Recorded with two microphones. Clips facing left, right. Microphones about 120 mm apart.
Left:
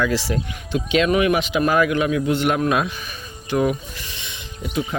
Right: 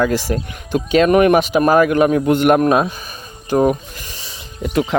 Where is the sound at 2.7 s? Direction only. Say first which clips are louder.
Right 6 dB; 40° right (ahead or behind).